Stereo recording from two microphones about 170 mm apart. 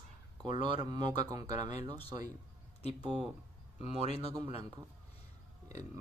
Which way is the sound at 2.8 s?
35° left (ahead or behind).